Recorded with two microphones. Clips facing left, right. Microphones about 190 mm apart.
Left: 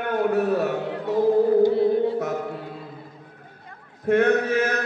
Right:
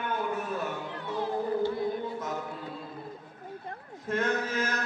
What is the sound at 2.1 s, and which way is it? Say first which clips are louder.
Music: left 10 dB; 70° left (ahead or behind).